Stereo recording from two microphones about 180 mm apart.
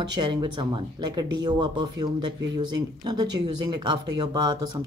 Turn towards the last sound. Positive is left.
turn(degrees=-20)  # may be behind; listen again after turning